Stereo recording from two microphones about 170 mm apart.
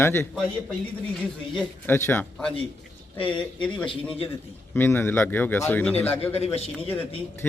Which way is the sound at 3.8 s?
35° left (ahead or behind).